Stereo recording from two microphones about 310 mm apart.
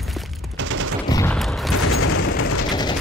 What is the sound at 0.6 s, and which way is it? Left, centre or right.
Gunshot, right.